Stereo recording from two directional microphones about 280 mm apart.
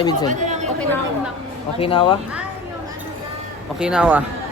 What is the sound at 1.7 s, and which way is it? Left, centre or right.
Speech, centre.